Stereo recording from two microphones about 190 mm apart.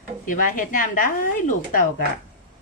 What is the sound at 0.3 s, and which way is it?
Speech, 45° left (ahead or behind).